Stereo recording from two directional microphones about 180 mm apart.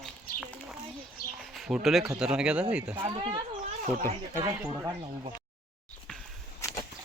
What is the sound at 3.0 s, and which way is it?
Speech, 30° right (ahead or behind).